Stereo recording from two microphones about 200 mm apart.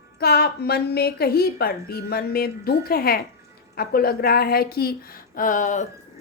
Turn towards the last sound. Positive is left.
turn(degrees=40)  # may be behind; listen again after turning